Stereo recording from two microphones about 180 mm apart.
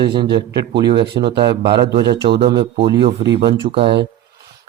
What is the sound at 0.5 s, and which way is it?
Speech, 65° right (ahead or behind).